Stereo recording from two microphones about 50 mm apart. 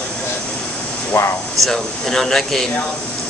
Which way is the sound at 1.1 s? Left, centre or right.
Left.